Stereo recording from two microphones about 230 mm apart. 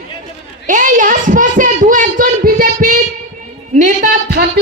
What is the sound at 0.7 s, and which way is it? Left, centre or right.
A man's voice, right.